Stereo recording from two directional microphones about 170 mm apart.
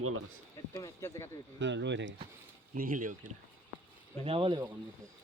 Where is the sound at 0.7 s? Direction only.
20° left (ahead or behind).